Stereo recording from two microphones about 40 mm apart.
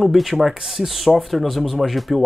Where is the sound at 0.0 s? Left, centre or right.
Centre.